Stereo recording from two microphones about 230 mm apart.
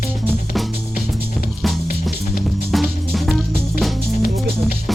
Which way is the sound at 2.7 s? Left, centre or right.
Centre.